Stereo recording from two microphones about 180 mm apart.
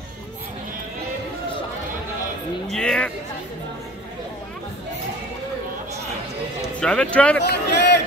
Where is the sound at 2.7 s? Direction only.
5° left (ahead or behind).